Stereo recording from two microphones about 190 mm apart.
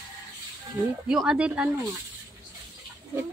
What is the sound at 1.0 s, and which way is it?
Speech, 5° right (ahead or behind).